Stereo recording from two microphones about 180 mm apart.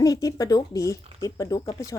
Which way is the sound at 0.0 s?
20° left (ahead or behind).